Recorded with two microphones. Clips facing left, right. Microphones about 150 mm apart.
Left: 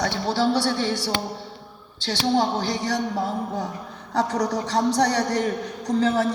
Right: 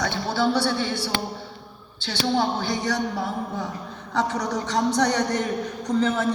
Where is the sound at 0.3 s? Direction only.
35° left (ahead or behind).